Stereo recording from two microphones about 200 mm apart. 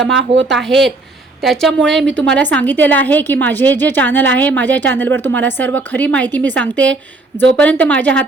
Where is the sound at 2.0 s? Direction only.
65° right (ahead or behind).